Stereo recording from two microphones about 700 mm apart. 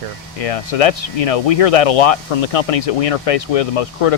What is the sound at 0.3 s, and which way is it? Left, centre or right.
Speech, left.